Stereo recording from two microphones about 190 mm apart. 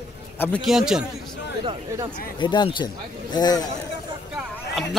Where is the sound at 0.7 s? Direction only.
5° right (ahead or behind).